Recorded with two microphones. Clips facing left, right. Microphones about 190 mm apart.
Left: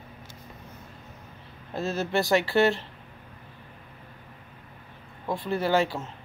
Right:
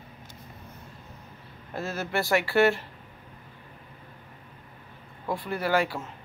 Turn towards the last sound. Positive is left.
turn(degrees=25)  # may be behind; listen again after turning